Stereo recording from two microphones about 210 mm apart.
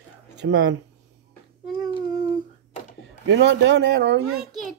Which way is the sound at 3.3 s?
55° right (ahead or behind).